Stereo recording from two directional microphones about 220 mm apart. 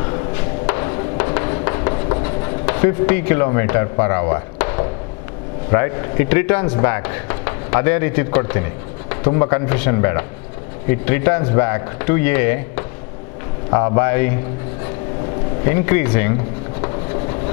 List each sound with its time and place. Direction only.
0.7 s a sound: 20° left (ahead or behind)
5.7 s speech: 15° left (ahead or behind)
15.6 s speech: 15° left (ahead or behind)